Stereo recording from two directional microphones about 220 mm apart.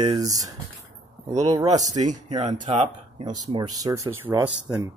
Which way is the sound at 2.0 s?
30° right (ahead or behind).